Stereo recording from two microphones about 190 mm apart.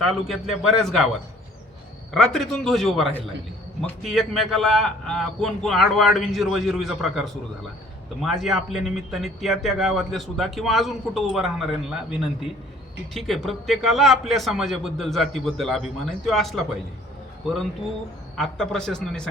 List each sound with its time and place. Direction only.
0.0 s a man's voice: centre (ahead or behind)
2.1 s a man's voice: centre (ahead or behind)
8.2 s a man's voice: centre (ahead or behind)
13.1 s a man's voice: centre (ahead or behind)